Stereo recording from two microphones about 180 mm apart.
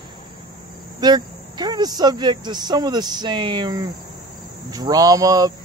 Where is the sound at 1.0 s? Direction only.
25° right (ahead or behind).